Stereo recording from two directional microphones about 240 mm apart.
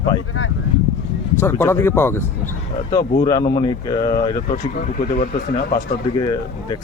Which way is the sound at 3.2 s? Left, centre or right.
Centre.